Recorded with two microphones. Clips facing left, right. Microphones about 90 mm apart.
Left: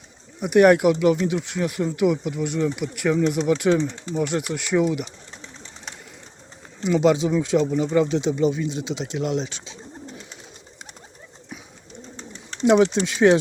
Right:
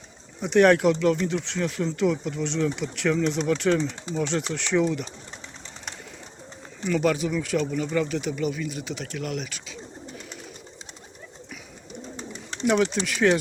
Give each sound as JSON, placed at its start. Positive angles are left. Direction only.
{"t": 0.3, "sound": "speech", "side_deg": 10}
{"t": 6.8, "sound": "speech", "side_deg": 20}
{"t": 12.1, "sound": "bird", "side_deg": -15}
{"t": 12.6, "sound": "speech", "side_deg": 20}